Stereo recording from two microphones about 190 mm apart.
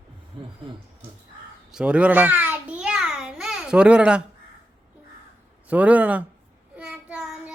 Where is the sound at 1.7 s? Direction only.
5° right (ahead or behind).